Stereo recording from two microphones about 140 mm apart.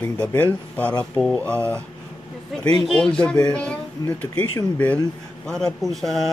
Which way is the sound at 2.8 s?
5° left (ahead or behind).